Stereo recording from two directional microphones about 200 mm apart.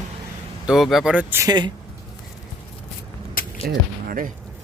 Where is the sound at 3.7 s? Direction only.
50° right (ahead or behind).